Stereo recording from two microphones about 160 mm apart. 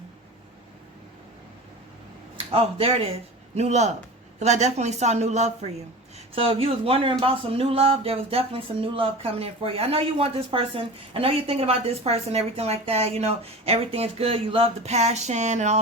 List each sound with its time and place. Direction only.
2.5 s a woman's voice: 35° right (ahead or behind)